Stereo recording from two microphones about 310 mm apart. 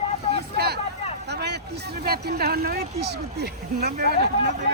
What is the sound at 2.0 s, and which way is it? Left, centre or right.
Speech, right.